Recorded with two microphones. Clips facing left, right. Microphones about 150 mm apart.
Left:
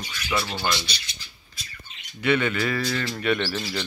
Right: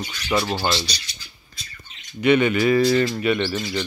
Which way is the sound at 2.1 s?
20° right (ahead or behind).